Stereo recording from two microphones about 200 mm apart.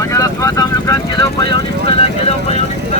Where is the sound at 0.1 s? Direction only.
15° left (ahead or behind).